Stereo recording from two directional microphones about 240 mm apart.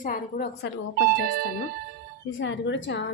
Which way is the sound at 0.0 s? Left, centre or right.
Left.